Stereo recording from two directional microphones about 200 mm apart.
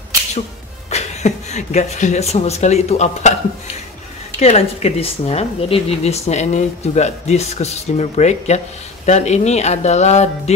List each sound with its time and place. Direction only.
0.8 s speech: 35° left (ahead or behind)
4.4 s a woman's voice: 30° left (ahead or behind)